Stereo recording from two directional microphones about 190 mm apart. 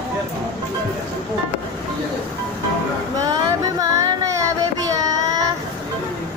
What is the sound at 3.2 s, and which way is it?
Music, 20° right (ahead or behind).